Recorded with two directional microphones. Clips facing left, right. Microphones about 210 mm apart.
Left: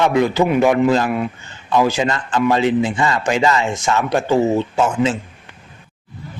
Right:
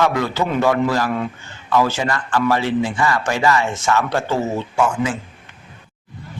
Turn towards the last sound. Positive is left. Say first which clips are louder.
# left 2 dB
turn(degrees=25)  # may be behind; listen again after turning